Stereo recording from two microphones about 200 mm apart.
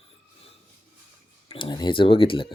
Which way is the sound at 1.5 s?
25° left (ahead or behind).